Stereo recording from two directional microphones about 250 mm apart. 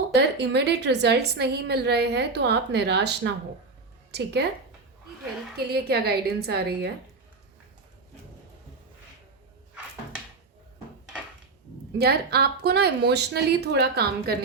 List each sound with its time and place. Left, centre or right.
0.1 s a woman's voice: right
5.5 s a woman's voice: right
11.9 s a woman's voice: right